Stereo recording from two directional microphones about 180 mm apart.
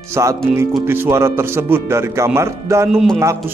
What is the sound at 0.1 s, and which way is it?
Speech, 15° right (ahead or behind).